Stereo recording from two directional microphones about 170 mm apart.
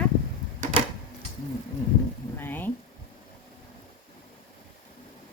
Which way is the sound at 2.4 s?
10° left (ahead or behind).